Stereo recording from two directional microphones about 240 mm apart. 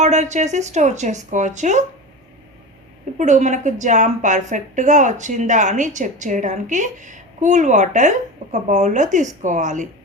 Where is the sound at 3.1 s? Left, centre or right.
Right.